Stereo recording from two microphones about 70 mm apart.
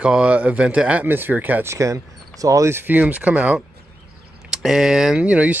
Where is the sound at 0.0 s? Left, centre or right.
Centre.